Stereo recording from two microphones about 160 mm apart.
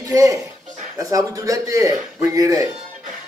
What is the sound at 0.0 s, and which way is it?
Speech, 20° right (ahead or behind).